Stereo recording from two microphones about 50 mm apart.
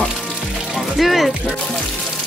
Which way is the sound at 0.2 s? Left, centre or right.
Centre.